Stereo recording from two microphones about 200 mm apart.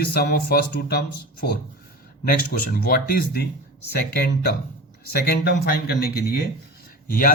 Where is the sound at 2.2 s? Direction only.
45° left (ahead or behind).